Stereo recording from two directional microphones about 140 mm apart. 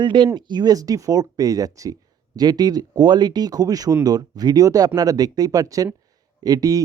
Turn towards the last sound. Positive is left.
turn(degrees=-25)  # may be behind; listen again after turning